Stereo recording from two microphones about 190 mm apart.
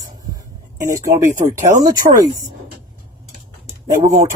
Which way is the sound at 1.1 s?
40° right (ahead or behind).